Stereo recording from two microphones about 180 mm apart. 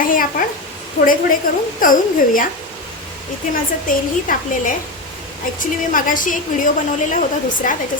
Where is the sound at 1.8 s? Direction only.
50° left (ahead or behind).